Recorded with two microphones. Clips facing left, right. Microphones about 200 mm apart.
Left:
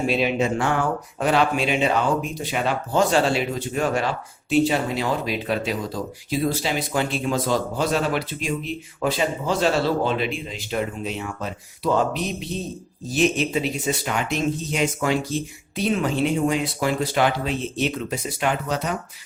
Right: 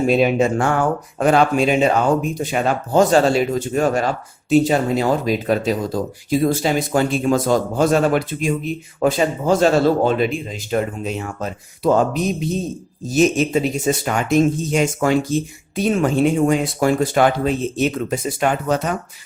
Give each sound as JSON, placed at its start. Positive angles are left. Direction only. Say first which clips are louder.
{"t": 0.1, "sound": "speech", "louder": "right 6 dB", "side_deg": -45}